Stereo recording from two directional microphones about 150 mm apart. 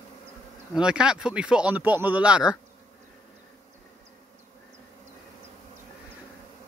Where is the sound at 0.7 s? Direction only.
5° right (ahead or behind).